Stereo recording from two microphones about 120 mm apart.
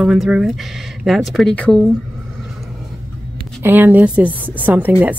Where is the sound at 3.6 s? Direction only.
15° right (ahead or behind).